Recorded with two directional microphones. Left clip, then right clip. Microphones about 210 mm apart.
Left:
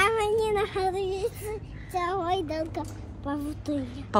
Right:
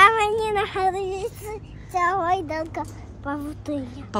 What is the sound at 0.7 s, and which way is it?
Speech, 5° right (ahead or behind).